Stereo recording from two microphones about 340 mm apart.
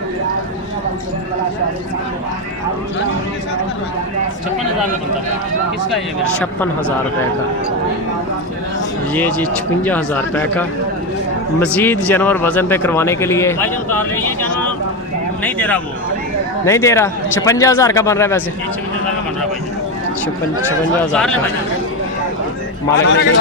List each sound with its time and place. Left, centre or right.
6.4 s speech: centre
9.1 s speech: centre
21.1 s speech: centre
23.0 s a man's voice: left